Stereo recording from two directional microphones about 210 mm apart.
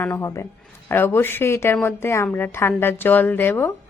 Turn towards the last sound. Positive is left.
turn(degrees=10)  # may be behind; listen again after turning